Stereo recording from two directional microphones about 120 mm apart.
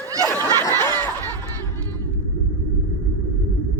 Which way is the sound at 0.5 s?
20° left (ahead or behind).